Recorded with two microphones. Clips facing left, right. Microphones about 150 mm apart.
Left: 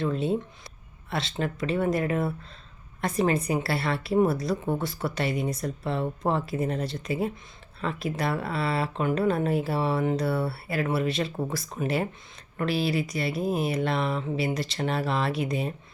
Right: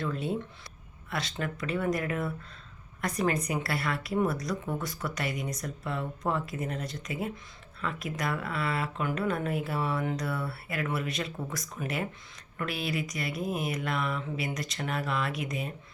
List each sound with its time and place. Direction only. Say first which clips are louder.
0.0 s a woman's voice: left 5 dB; 25° left (ahead or behind)